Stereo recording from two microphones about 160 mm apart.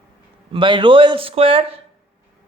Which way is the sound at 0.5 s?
30° right (ahead or behind).